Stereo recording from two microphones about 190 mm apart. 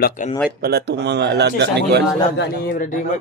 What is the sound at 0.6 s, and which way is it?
A man's voice, 60° right (ahead or behind).